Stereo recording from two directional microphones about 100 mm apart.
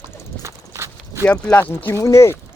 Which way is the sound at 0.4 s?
25° right (ahead or behind).